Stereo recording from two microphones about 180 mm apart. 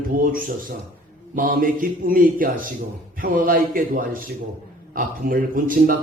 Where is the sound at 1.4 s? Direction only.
50° right (ahead or behind).